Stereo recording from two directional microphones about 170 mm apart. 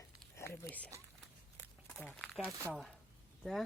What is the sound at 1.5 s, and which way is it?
Walk, 15° left (ahead or behind).